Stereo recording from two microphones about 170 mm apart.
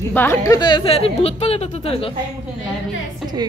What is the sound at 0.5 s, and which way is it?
Speech, 25° left (ahead or behind).